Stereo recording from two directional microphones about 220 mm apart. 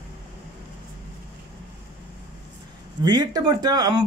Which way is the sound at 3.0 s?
20° right (ahead or behind).